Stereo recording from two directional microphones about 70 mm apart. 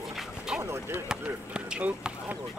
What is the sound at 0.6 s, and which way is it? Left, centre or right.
Speech, right.